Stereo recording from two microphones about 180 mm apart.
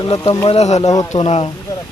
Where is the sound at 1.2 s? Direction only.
30° left (ahead or behind).